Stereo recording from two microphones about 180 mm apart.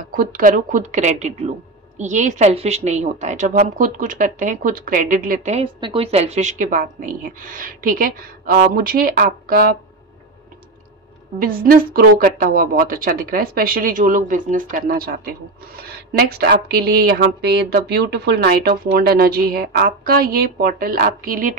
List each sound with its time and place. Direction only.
0.1 s a woman's voice: 50° right (ahead or behind)
5.8 s a woman's voice: 30° right (ahead or behind); by 9.8 s 55° right (ahead or behind)
11.3 s a woman's voice: 55° right (ahead or behind)